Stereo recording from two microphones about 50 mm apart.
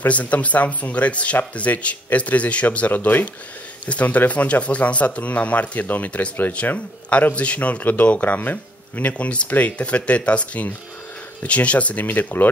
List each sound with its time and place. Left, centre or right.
0.0 s speech: left